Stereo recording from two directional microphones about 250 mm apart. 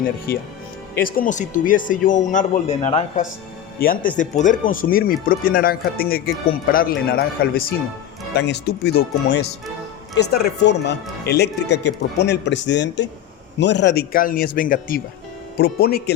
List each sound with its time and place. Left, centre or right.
1.0 s speech: left